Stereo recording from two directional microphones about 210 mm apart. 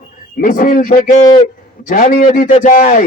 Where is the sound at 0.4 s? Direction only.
40° left (ahead or behind).